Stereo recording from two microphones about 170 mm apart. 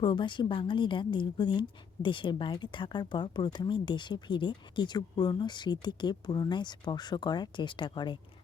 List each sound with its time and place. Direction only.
0.0 s a woman's voice: 30° left (ahead or behind)